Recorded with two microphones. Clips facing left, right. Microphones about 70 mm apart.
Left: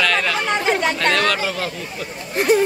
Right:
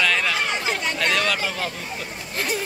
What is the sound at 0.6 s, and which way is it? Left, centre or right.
Chatter, left.